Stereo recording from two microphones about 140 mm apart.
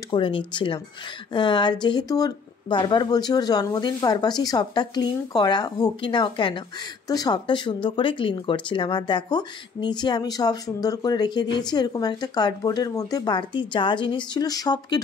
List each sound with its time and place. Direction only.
0.1 s speech: 40° left (ahead or behind)